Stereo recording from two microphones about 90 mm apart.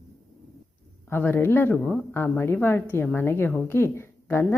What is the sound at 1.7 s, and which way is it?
Speech, 10° left (ahead or behind).